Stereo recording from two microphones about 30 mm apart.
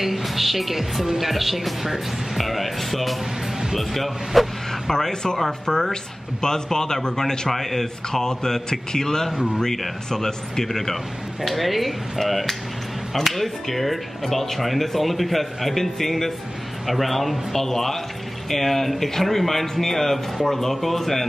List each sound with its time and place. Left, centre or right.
0.0 s a man's voice: centre
4.9 s a man's voice: left